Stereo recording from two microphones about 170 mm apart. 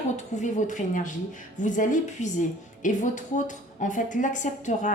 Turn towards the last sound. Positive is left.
turn(degrees=45)  # may be behind; listen again after turning